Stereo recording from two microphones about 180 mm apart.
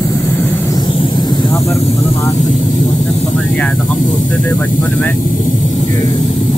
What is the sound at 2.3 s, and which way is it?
Speech, 45° left (ahead or behind).